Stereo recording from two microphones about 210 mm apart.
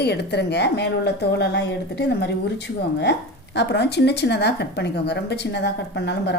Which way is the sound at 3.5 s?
55° left (ahead or behind).